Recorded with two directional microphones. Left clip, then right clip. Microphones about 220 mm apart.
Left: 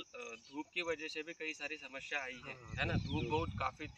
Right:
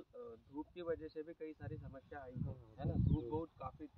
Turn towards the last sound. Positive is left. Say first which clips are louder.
# left 10 dB
turn(degrees=40)  # may be behind; listen again after turning